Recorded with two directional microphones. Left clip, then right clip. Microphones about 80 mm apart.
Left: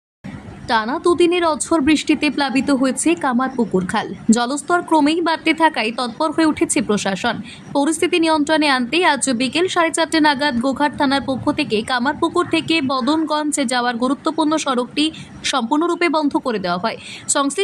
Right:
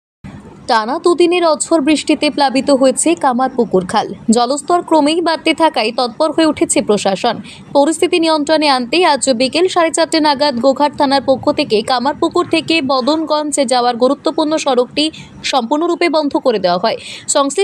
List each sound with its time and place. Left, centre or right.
0.7 s a woman's voice: right
1.0 s speech: right
4.3 s speech: right
17.3 s speech: right